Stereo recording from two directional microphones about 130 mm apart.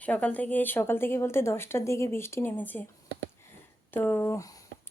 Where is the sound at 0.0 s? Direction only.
10° left (ahead or behind).